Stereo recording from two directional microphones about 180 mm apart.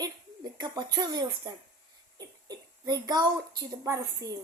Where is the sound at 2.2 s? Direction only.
20° right (ahead or behind).